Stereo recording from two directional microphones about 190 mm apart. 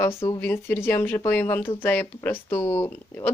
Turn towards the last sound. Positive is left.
turn(degrees=15)  # may be behind; listen again after turning